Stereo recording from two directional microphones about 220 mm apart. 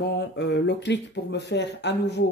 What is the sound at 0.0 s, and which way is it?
Speech, 50° left (ahead or behind).